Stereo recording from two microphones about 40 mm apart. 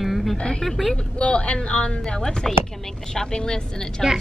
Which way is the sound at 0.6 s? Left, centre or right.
Centre.